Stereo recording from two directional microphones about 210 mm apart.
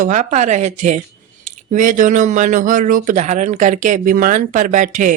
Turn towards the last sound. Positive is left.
turn(degrees=-35)  # may be behind; listen again after turning